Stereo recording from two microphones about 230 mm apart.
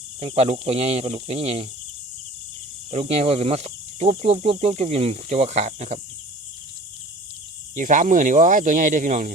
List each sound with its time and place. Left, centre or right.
0.2 s speech: right
2.9 s speech: right
7.8 s speech: right